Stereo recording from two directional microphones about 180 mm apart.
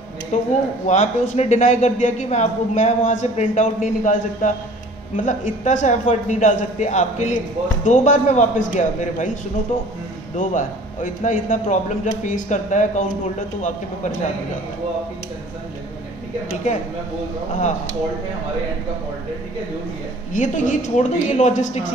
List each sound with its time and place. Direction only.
0.3 s a woman's voice: 40° left (ahead or behind)
20.3 s a man's voice: 45° left (ahead or behind)